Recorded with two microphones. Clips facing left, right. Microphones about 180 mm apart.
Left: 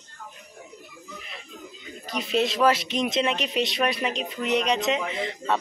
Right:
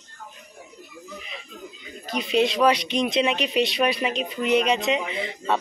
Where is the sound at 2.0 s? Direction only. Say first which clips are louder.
Right 3 dB; centre (ahead or behind).